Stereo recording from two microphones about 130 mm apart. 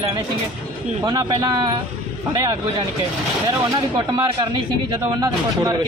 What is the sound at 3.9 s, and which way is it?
A man's voice, 35° right (ahead or behind).